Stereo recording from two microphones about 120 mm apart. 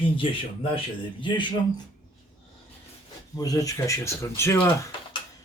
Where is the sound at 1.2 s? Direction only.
40° left (ahead or behind).